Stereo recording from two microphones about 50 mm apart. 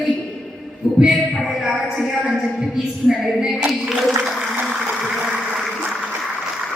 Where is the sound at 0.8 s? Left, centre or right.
Right.